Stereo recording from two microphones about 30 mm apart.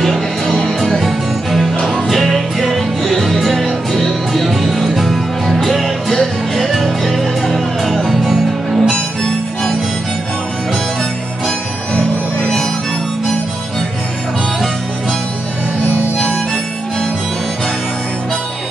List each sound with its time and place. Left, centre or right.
0.0 s music: centre
8.9 s music: left